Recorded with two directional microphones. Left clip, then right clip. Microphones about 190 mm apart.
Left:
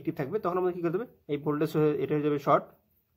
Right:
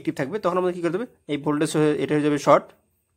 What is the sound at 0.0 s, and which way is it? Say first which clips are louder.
Speech: right 6 dB; 30° right (ahead or behind).